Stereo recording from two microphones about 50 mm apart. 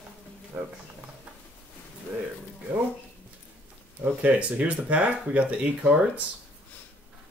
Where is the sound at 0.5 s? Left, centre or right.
Right.